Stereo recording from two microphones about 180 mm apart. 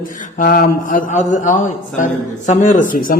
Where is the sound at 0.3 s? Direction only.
50° left (ahead or behind).